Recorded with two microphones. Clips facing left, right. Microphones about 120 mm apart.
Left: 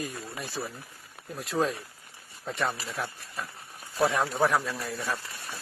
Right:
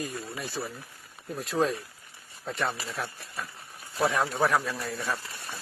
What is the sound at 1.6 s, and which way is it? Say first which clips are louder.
Speech: right 1 dB; 5° left (ahead or behind).